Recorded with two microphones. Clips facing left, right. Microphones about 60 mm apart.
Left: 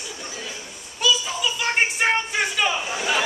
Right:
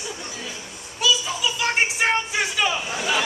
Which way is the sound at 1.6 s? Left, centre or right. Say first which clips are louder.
Even; centre.